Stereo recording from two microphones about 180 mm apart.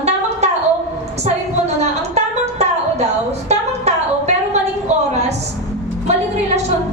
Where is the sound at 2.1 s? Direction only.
40° right (ahead or behind).